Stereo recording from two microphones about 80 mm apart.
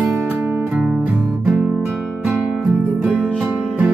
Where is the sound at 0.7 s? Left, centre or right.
Centre.